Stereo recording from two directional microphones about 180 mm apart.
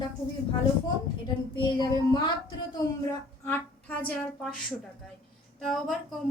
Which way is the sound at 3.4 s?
10° left (ahead or behind).